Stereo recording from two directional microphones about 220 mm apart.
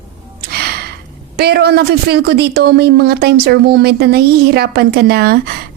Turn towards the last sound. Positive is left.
turn(degrees=-45)  # may be behind; listen again after turning